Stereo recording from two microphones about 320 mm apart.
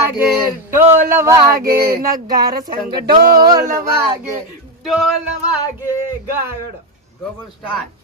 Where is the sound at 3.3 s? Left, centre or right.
Centre.